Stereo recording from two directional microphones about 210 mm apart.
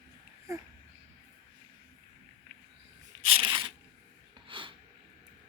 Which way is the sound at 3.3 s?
25° right (ahead or behind).